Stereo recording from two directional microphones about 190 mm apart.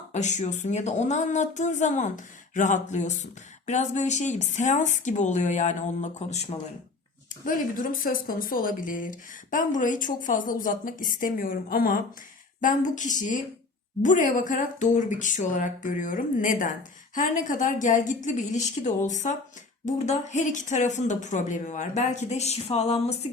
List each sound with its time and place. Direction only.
0.1 s a woman's voice: 40° left (ahead or behind)